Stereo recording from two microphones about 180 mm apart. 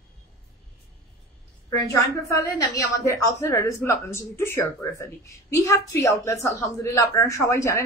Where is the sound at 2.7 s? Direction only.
15° left (ahead or behind).